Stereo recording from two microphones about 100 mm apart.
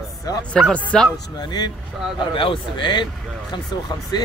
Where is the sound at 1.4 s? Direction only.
45° left (ahead or behind).